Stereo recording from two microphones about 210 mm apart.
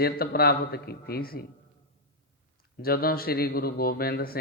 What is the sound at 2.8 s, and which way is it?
A man's voice, 45° left (ahead or behind).